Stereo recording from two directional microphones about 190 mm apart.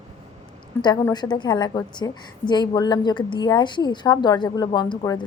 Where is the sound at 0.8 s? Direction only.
20° left (ahead or behind).